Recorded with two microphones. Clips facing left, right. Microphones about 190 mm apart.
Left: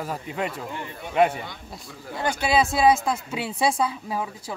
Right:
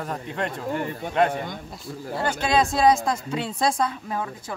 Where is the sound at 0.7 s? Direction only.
45° right (ahead or behind).